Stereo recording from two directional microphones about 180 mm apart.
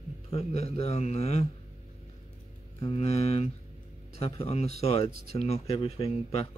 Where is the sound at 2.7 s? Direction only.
35° left (ahead or behind).